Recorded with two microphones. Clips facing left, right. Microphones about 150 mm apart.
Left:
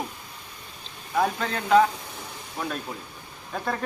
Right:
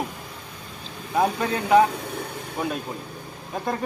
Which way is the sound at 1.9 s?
60° right (ahead or behind).